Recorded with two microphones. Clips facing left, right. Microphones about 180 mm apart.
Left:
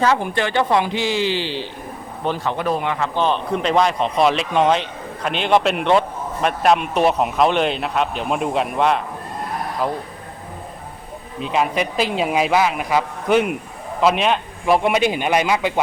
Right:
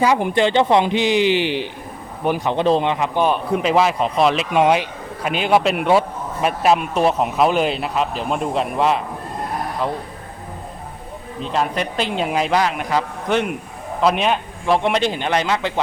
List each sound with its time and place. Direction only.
0.0 s a woman's voice: 15° right (ahead or behind); by 10.0 s 5° left (ahead or behind)
11.3 s a man's voice: 5° left (ahead or behind)